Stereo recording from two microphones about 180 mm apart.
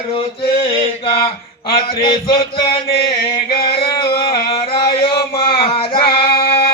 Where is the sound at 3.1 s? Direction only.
55° left (ahead or behind).